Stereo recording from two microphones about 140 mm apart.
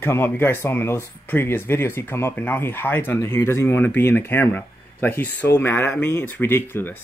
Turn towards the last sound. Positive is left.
turn(degrees=15)  # may be behind; listen again after turning